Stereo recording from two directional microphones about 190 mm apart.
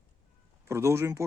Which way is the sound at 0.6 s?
15° right (ahead or behind).